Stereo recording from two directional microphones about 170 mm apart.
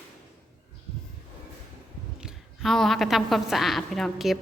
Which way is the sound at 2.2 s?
Centre (ahead or behind).